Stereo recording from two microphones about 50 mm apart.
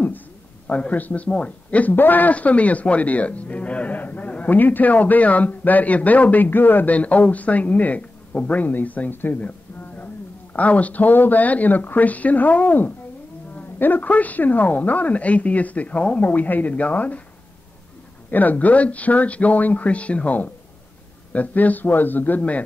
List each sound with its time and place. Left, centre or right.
0.7 s a man's voice: left
9.4 s a sound: left
10.5 s a man's voice: left
18.3 s a man's voice: left